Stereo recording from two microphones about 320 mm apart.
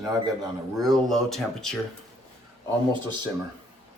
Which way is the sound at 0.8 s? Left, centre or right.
Centre.